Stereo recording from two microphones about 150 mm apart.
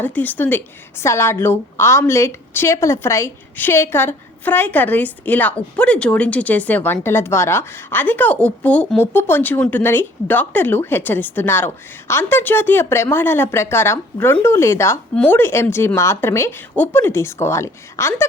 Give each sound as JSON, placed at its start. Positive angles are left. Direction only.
{"t": 0.0, "sound": "a woman's voice", "side_deg": 10}